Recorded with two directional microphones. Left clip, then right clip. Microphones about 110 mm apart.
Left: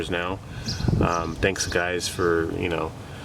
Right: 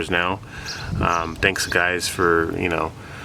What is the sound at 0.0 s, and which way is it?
Speech, 30° right (ahead or behind).